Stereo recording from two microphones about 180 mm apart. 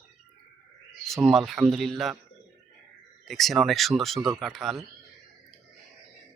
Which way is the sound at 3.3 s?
Centre (ahead or behind).